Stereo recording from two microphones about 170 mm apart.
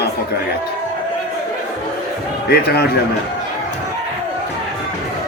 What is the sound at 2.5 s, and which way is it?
Speech, 70° left (ahead or behind).